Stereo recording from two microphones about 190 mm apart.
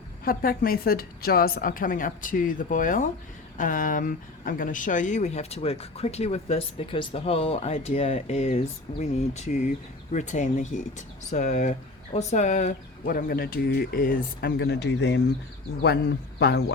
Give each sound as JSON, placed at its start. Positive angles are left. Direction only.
{"t": 0.3, "sound": "speech", "side_deg": 50}
{"t": 16.4, "sound": "a man's voice", "side_deg": 60}